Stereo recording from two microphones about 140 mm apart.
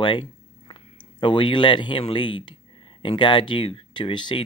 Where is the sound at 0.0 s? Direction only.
35° left (ahead or behind).